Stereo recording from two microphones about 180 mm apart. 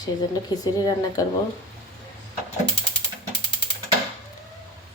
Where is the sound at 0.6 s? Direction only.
20° left (ahead or behind).